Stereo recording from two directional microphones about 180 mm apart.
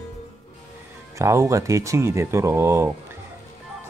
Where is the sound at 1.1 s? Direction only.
15° right (ahead or behind).